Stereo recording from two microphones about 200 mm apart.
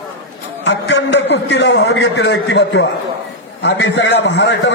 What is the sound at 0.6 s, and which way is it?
A man's voice, 60° left (ahead or behind).